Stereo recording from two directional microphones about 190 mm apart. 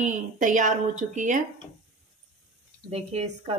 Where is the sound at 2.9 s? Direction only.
35° right (ahead or behind).